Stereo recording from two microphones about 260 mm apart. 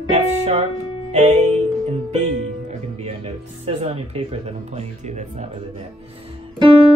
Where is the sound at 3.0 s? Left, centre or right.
Right.